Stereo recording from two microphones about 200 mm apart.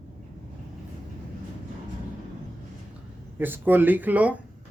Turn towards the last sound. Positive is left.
turn(degrees=-5)  # may be behind; listen again after turning